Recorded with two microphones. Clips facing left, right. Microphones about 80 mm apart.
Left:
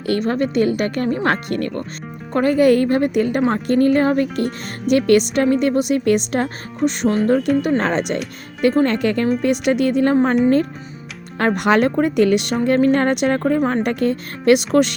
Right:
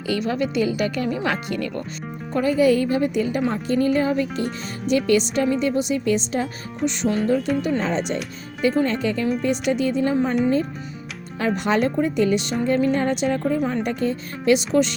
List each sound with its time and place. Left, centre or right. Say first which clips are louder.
0.1 s speech: left 4 dB; left
11.3 s speech: left 5 dB; left
13.6 s speech: left 5 dB; left
13.8 s speech: left 4 dB; left